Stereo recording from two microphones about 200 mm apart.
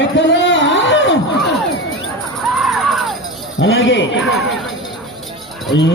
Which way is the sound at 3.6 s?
70° left (ahead or behind).